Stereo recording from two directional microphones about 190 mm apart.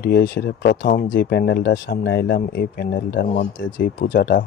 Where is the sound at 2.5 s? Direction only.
55° left (ahead or behind).